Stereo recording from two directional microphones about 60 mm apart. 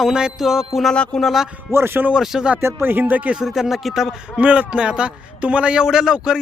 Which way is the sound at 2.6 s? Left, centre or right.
Right.